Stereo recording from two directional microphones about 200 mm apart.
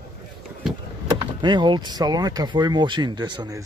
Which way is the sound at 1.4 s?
25° right (ahead or behind).